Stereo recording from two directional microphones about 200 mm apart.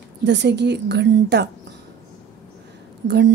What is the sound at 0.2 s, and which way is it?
A woman's voice, 60° right (ahead or behind).